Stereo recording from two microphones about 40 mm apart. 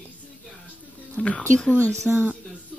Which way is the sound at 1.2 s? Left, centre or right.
Left.